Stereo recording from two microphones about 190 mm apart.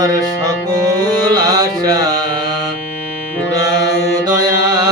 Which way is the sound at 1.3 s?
20° right (ahead or behind).